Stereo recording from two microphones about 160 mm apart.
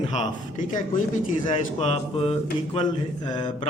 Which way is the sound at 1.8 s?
40° left (ahead or behind).